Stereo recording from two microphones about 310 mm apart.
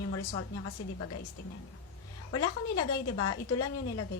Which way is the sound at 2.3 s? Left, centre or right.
Left.